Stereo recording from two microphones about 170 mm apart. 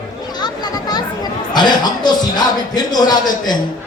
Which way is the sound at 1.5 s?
25° left (ahead or behind).